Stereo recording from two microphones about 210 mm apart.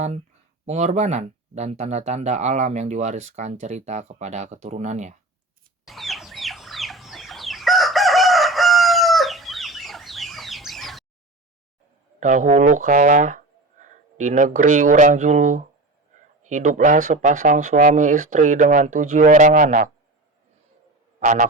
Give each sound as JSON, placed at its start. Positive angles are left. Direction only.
{"t": 0.6, "sound": "speech", "side_deg": -35}
{"t": 5.8, "sound": "chicken", "side_deg": 0}
{"t": 12.2, "sound": "speech", "side_deg": -35}
{"t": 21.2, "sound": "a man's voice", "side_deg": -40}